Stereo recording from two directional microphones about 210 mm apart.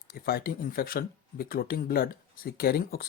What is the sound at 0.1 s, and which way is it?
Speech, 45° left (ahead or behind).